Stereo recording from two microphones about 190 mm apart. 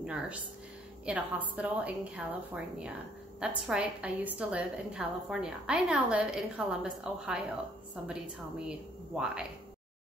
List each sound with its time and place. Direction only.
0.0 s a woman's voice: 5° right (ahead or behind)
8.6 s a woman's voice: 5° right (ahead or behind)